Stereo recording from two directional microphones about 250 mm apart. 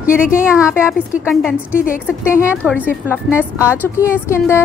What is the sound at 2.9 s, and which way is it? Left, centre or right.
Speech, centre.